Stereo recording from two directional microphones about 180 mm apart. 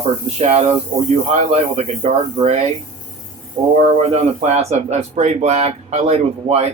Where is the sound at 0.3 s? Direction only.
40° right (ahead or behind).